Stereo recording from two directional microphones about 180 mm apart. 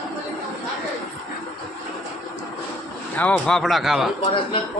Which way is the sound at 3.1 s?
10° left (ahead or behind).